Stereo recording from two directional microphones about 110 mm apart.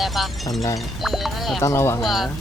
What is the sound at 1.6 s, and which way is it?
Speech, 25° left (ahead or behind).